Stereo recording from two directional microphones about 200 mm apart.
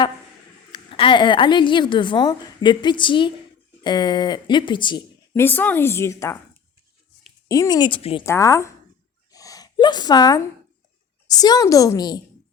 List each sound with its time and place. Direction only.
0.7 s a woman's voice: 25° left (ahead or behind)
5.3 s speech: 10° left (ahead or behind)
7.4 s a woman's voice: 15° left (ahead or behind)
8.2 s speech: 15° left (ahead or behind)
9.3 s a sound: 15° left (ahead or behind)
11.3 s a woman's voice: 20° left (ahead or behind)